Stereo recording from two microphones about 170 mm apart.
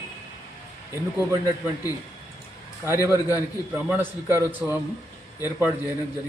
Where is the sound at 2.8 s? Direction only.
15° right (ahead or behind).